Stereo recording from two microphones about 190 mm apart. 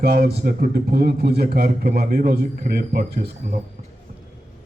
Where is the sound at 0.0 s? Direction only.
60° right (ahead or behind).